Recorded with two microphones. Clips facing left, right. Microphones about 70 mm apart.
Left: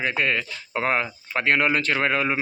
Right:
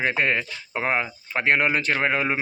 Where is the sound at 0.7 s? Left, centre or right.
Centre.